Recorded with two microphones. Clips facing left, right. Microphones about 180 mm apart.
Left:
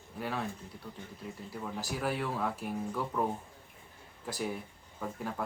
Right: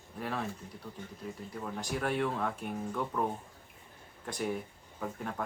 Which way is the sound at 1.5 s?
5° left (ahead or behind).